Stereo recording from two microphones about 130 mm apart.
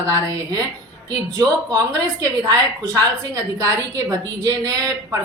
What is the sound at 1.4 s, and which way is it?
A woman's voice, 30° right (ahead or behind).